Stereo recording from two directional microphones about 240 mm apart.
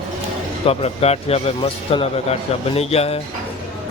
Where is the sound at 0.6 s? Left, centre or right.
Left.